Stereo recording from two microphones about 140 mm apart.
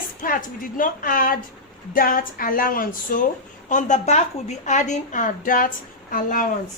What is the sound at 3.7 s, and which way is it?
A woman's voice, 60° left (ahead or behind).